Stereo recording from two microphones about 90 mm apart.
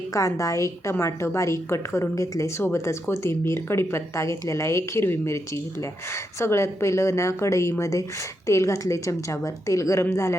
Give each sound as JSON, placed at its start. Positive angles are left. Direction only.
{"t": 0.1, "sound": "a woman's voice", "side_deg": 35}